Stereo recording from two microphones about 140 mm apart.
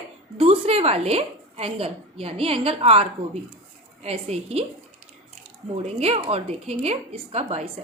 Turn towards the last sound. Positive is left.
turn(degrees=-50)  # may be behind; listen again after turning